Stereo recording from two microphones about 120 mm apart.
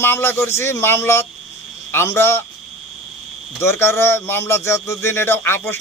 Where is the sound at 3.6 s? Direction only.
20° left (ahead or behind).